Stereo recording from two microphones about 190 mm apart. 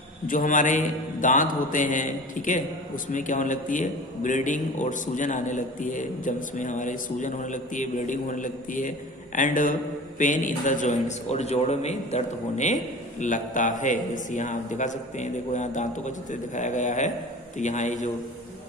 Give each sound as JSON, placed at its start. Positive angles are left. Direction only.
{"t": 0.3, "sound": "mantra", "side_deg": 45}
{"t": 3.1, "sound": "a man's voice", "side_deg": 40}